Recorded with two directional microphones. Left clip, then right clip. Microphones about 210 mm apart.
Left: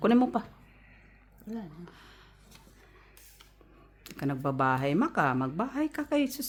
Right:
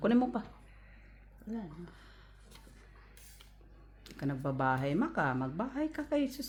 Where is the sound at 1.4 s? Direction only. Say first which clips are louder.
Left 2 dB; 35° left (ahead or behind).